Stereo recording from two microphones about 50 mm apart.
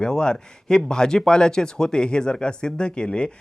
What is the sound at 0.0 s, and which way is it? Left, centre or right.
Speech, centre.